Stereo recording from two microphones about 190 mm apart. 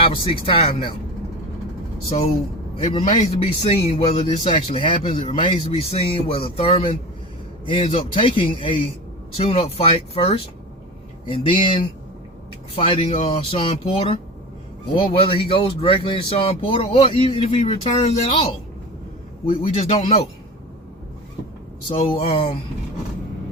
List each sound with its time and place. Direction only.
0.0 s speech: 30° left (ahead or behind)
2.8 s speech: 30° left (ahead or behind)
21.8 s speech: 30° left (ahead or behind)